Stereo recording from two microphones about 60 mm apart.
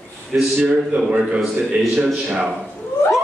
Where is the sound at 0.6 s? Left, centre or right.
Centre.